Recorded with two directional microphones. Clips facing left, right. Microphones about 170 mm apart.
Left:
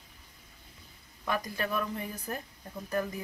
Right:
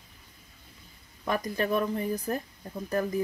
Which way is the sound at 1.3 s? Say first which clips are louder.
Right 5 dB; 35° right (ahead or behind).